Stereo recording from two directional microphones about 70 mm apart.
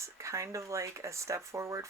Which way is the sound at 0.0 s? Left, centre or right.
Right.